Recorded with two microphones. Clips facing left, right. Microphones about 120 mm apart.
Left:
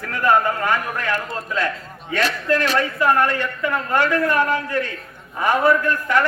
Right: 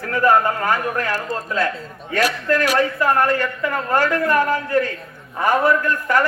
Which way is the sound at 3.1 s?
45° right (ahead or behind).